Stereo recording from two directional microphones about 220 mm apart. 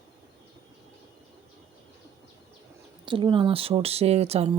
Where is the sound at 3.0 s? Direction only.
20° right (ahead or behind).